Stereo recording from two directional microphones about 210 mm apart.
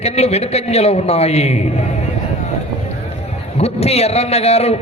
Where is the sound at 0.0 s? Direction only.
30° left (ahead or behind).